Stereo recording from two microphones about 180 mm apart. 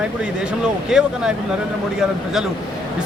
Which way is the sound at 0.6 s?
5° right (ahead or behind).